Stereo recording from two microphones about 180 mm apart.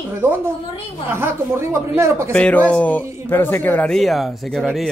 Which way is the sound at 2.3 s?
5° left (ahead or behind).